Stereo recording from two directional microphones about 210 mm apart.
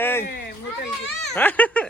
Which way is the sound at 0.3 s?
45° left (ahead or behind).